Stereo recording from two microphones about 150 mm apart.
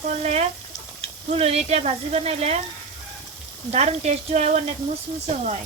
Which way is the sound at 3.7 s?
45° right (ahead or behind).